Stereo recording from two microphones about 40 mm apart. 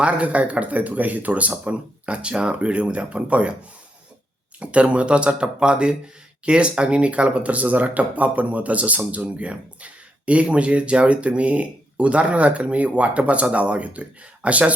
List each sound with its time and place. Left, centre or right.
0.0 s speech: right
4.6 s speech: right